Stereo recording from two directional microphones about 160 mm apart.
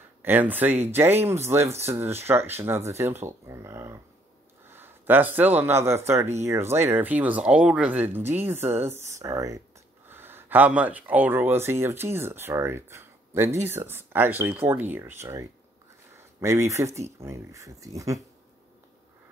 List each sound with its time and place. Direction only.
0.2 s speech: 10° right (ahead or behind)